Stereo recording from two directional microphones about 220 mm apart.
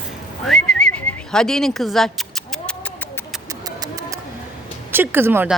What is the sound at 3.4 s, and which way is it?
Music, 15° right (ahead or behind).